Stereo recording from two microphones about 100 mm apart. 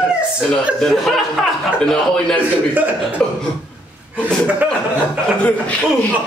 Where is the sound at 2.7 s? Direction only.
15° right (ahead or behind).